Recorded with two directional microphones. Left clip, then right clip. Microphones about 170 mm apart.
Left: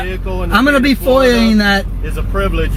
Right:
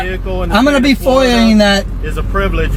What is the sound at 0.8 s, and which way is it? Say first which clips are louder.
Speech: right 1 dB; 85° right.